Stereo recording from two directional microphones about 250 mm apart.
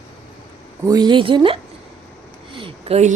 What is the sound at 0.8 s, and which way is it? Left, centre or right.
Speech, centre.